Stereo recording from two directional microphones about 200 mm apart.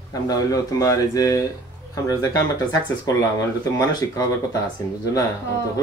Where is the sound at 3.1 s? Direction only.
15° left (ahead or behind).